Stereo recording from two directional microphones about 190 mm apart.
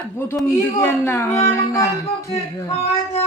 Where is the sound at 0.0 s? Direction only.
10° left (ahead or behind).